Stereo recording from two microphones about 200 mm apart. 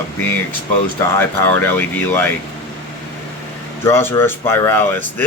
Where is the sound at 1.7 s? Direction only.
10° left (ahead or behind).